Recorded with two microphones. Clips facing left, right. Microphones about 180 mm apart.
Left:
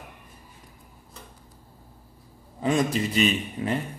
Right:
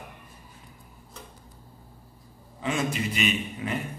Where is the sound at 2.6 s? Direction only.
35° left (ahead or behind).